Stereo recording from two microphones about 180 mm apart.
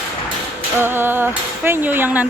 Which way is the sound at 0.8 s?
10° right (ahead or behind).